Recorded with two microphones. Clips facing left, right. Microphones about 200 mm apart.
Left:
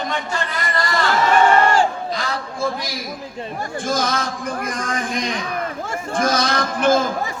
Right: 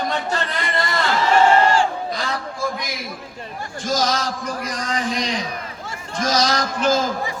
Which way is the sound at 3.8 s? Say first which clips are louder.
Right 1 dB; 55° left (ahead or behind).